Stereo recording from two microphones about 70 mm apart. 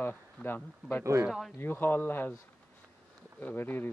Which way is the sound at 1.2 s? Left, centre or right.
Centre.